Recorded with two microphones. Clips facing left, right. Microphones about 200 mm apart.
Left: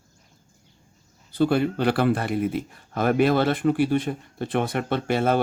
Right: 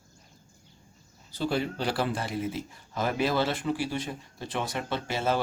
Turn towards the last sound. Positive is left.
turn(degrees=55)  # may be behind; listen again after turning